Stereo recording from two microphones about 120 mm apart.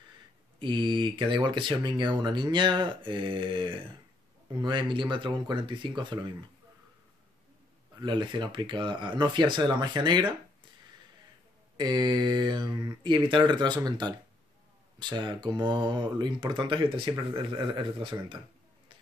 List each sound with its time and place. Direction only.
0.6 s speech: 40° right (ahead or behind)
8.0 s speech: 40° right (ahead or behind)
11.7 s speech: 35° right (ahead or behind)